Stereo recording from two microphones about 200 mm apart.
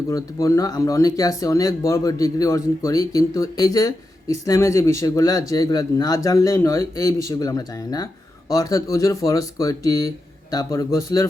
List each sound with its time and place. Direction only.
0.1 s speech: 15° left (ahead or behind)